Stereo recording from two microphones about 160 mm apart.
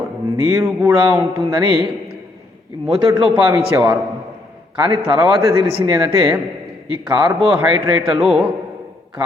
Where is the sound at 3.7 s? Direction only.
25° right (ahead or behind).